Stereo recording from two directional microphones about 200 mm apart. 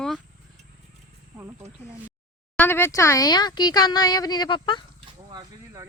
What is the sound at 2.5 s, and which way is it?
Speech, 10° left (ahead or behind).